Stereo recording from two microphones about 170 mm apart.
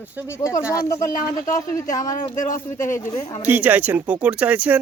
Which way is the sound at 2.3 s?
50° left (ahead or behind).